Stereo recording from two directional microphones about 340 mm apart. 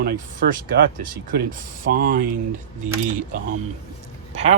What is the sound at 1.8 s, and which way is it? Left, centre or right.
Speech, right.